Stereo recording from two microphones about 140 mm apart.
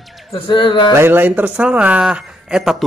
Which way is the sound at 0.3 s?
35° left (ahead or behind).